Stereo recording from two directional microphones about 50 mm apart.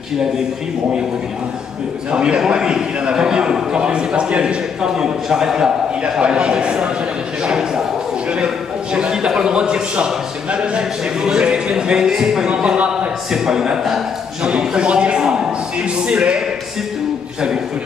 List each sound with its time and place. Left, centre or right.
2.0 s a man's voice: centre
7.4 s a sound: centre
8.9 s a man's voice: centre
13.3 s a man's voice: centre